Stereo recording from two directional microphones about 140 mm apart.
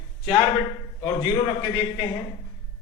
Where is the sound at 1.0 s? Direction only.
40° left (ahead or behind).